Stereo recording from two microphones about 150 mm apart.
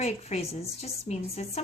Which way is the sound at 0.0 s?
45° left (ahead or behind).